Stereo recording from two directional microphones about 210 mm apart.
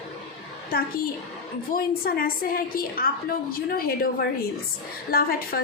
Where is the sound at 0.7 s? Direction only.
45° left (ahead or behind).